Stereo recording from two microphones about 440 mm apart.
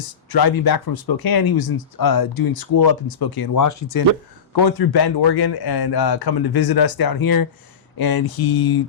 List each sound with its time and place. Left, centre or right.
0.3 s speech: left
4.5 s a man's voice: left